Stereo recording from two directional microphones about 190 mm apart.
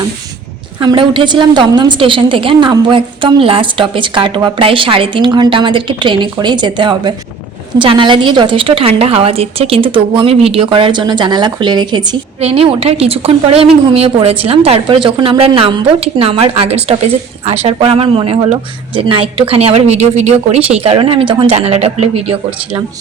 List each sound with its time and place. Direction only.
0.8 s a woman's voice: 25° right (ahead or behind)